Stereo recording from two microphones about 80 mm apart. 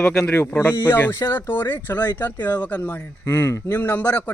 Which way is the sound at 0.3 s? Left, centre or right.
Left.